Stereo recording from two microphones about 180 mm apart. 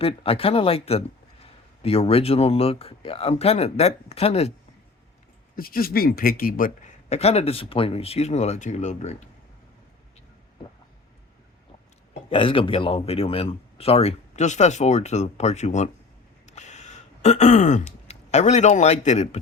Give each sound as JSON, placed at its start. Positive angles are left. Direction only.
{"t": 0.0, "sound": "a man's voice", "side_deg": 30}
{"t": 5.5, "sound": "a man's voice", "side_deg": 55}
{"t": 12.3, "sound": "a man's voice", "side_deg": 30}
{"t": 16.5, "sound": "a sound", "side_deg": 40}